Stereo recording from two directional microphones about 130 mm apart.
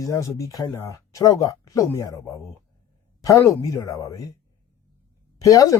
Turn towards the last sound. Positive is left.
turn(degrees=25)  # may be behind; listen again after turning